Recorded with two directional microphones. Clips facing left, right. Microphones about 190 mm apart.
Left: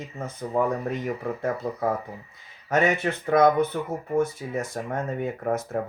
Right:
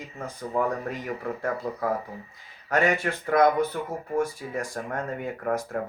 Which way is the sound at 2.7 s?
20° left (ahead or behind).